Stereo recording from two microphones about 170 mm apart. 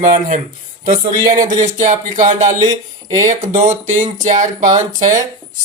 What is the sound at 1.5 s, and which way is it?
Speech, 45° right (ahead or behind).